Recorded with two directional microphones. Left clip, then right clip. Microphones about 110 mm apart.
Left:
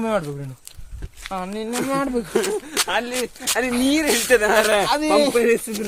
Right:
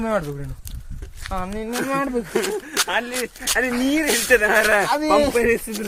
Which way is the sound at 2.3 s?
55° left (ahead or behind).